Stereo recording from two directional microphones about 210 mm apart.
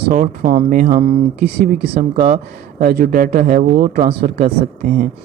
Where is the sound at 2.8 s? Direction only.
45° right (ahead or behind).